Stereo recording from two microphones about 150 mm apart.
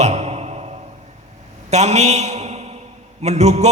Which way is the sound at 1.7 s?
50° right (ahead or behind).